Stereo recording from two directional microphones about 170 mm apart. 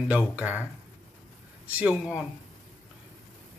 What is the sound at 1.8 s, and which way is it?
Speech, 5° right (ahead or behind).